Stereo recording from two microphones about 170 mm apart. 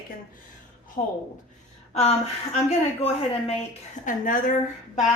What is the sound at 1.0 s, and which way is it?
Speech, 35° left (ahead or behind).